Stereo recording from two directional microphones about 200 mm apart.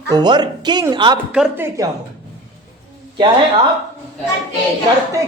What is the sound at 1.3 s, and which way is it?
Speech, 5° right (ahead or behind).